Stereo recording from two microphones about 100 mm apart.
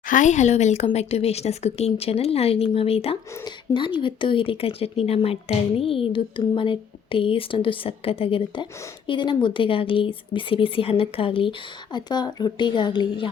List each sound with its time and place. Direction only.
0.5 s speech: 90° left
3.4 s speech: 55° left (ahead or behind)
9.0 s speech: 50° left (ahead or behind)